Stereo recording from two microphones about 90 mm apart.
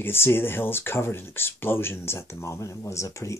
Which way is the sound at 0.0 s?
25° left (ahead or behind).